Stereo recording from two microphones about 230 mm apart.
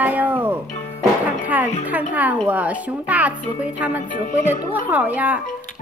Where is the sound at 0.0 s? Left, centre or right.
Centre.